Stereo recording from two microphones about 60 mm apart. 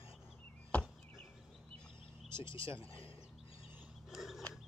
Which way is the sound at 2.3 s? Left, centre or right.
Right.